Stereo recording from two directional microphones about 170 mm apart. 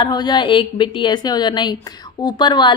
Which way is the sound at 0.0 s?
25° left (ahead or behind).